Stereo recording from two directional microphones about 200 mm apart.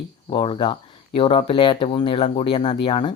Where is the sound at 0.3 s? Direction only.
25° left (ahead or behind).